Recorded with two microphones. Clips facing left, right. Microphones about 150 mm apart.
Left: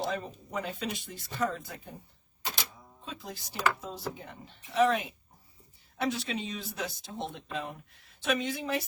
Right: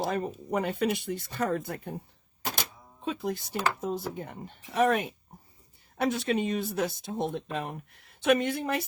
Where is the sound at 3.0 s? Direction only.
55° right (ahead or behind).